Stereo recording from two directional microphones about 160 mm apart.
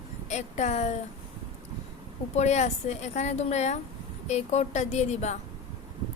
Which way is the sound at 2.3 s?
45° left (ahead or behind).